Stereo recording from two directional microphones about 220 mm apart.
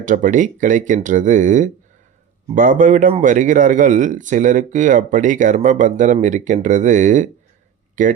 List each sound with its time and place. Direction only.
0.0 s speech: 35° right (ahead or behind)